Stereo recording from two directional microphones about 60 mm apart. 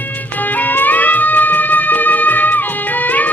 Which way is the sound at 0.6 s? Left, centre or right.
Left.